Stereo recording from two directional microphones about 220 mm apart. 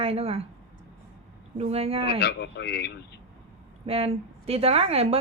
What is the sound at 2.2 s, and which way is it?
A man's voice, 50° left (ahead or behind).